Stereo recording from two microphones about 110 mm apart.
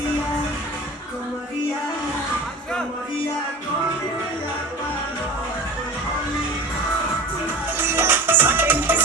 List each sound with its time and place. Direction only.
7.8 s music: 20° right (ahead or behind)